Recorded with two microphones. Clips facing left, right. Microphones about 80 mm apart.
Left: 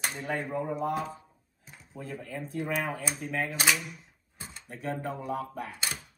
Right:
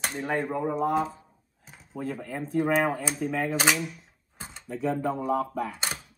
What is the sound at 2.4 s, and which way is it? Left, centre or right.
Speech, right.